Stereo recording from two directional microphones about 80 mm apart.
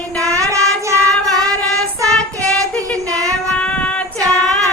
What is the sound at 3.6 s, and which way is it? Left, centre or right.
Child singing, centre.